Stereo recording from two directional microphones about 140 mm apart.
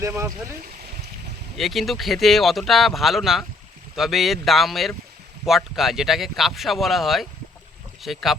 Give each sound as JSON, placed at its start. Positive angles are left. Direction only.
{"t": 0.0, "sound": "speech", "side_deg": -20}
{"t": 1.5, "sound": "speech", "side_deg": 0}